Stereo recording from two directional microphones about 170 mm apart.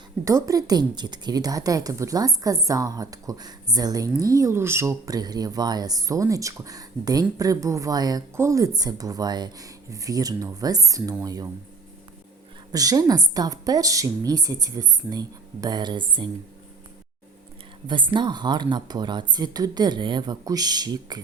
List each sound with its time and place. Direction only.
0.3 s speech: 20° right (ahead or behind)
12.7 s speech: 20° right (ahead or behind)
17.8 s speech: 30° right (ahead or behind)